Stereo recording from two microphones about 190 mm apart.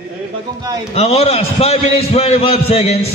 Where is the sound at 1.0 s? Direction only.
35° left (ahead or behind).